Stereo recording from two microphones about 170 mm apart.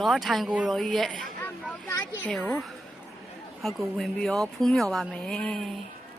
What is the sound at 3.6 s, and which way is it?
Speech, centre (ahead or behind).